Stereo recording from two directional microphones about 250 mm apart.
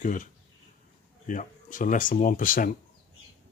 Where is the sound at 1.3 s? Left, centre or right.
Left.